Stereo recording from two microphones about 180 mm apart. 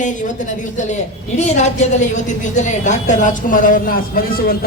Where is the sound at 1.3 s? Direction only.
40° left (ahead or behind).